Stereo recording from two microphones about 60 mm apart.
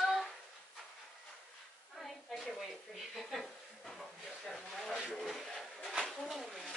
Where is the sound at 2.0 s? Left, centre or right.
Centre.